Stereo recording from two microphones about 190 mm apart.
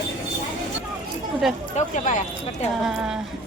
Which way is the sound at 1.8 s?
40° left (ahead or behind).